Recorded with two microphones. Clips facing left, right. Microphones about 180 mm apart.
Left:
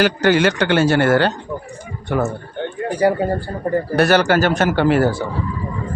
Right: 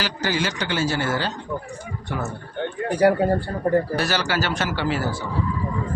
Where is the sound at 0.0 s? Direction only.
60° left (ahead or behind).